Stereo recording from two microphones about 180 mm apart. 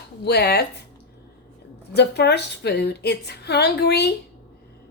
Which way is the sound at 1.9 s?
70° left (ahead or behind).